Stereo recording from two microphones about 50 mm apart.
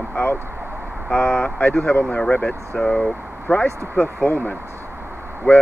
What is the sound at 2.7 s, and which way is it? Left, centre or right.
Speech, centre.